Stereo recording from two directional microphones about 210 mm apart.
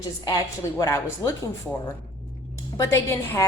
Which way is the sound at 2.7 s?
15° left (ahead or behind).